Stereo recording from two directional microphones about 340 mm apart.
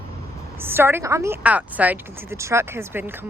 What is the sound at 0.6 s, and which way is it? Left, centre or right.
A woman's voice, centre.